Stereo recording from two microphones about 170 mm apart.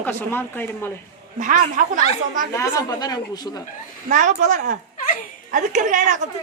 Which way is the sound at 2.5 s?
25° left (ahead or behind).